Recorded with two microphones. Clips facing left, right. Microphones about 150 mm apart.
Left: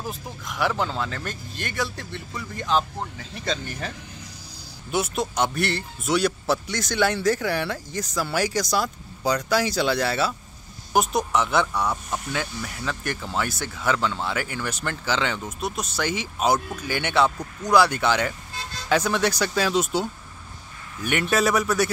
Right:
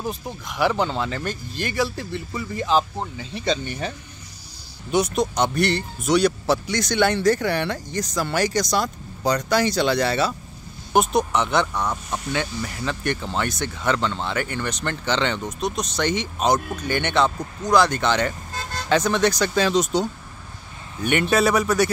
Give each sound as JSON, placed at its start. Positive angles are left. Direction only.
{"t": 0.0, "sound": "speech", "side_deg": 0}
{"t": 4.9, "sound": "speech", "side_deg": 5}
{"t": 18.5, "sound": "vehicle", "side_deg": -45}
{"t": 18.9, "sound": "speech", "side_deg": 5}